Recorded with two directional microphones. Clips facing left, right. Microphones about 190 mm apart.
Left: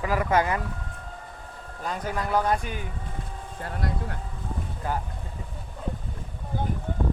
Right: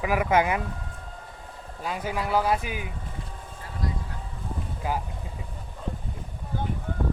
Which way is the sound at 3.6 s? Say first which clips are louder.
Left 3 dB; 65° left (ahead or behind).